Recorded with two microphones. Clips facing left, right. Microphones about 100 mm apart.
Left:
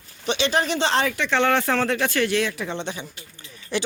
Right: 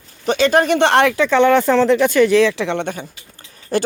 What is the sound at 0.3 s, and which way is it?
Speech, 45° right (ahead or behind).